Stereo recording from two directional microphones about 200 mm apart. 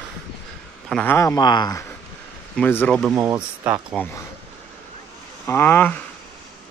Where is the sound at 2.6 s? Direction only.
5° left (ahead or behind).